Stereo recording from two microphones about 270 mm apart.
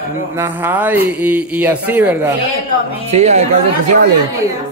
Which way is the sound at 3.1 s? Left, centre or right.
Right.